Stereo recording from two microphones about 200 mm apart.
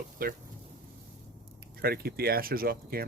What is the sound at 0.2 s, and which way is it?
Speech, 45° right (ahead or behind).